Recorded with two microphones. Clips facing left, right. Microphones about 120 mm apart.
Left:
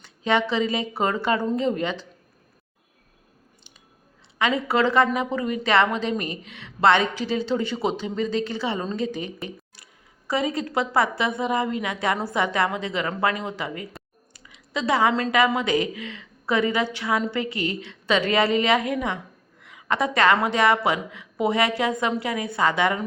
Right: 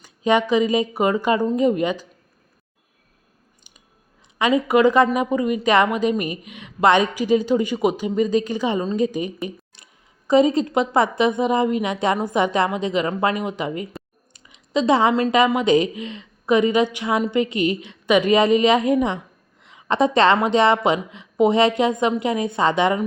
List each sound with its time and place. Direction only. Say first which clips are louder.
0.0 s a woman's voice: right 4 dB; 15° right (ahead or behind)
4.4 s a woman's voice: right 5 dB; 15° right (ahead or behind)